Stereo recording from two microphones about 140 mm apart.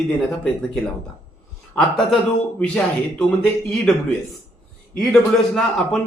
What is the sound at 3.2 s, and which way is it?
Speech, 10° left (ahead or behind).